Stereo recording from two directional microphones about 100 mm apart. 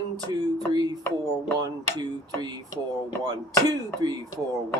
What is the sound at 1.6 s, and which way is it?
Speech, 40° right (ahead or behind).